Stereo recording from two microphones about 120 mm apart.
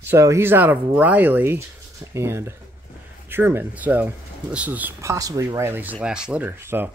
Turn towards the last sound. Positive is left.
turn(degrees=-20)  # may be behind; listen again after turning